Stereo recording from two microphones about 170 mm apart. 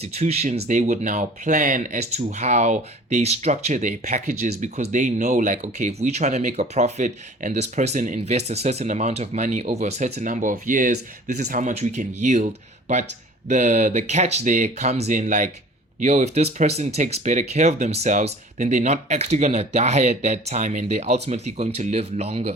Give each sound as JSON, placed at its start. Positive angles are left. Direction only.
{"t": 0.0, "sound": "speech", "side_deg": -40}
{"t": 13.5, "sound": "speech", "side_deg": -45}